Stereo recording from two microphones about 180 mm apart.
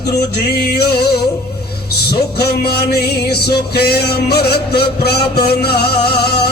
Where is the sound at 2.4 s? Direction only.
60° left (ahead or behind).